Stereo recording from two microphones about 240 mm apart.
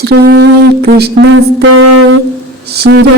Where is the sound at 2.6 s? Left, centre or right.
Right.